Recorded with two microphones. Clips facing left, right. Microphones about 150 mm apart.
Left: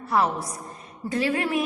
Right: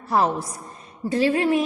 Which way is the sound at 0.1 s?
30° right (ahead or behind).